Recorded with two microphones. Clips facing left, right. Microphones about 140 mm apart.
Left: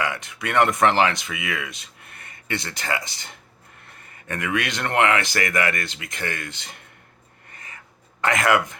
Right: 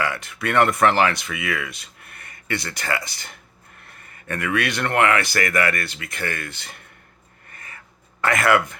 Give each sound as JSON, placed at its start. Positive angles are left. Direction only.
{"t": 0.0, "sound": "speech", "side_deg": 20}
{"t": 7.5, "sound": "owl", "side_deg": 20}
{"t": 8.2, "sound": "speech", "side_deg": 20}